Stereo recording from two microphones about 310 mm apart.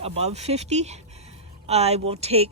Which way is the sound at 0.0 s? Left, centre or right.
Right.